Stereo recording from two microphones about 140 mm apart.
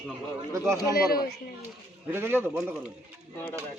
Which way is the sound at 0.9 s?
90° left.